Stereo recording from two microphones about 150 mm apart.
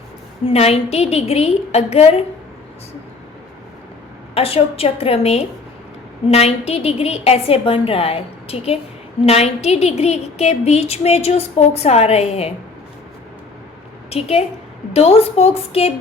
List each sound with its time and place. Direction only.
0.4 s a woman's voice: 45° left (ahead or behind)
4.4 s a woman's voice: 40° left (ahead or behind)
14.1 s a woman's voice: 40° left (ahead or behind)